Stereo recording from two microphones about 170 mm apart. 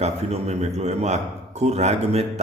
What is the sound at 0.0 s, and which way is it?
A man's voice, 40° right (ahead or behind).